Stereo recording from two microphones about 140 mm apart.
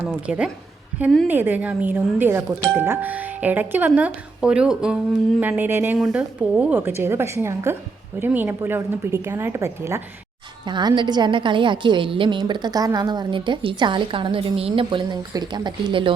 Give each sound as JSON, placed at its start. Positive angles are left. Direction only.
{"t": 0.3, "sound": "speech", "side_deg": -10}
{"t": 10.7, "sound": "a woman's voice", "side_deg": -35}